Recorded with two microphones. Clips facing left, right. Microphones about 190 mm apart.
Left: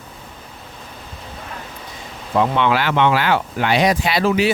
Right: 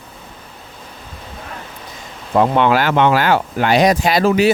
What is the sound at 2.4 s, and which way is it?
Speech, 45° right (ahead or behind).